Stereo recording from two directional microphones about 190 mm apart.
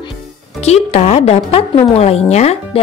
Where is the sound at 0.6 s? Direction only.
35° left (ahead or behind).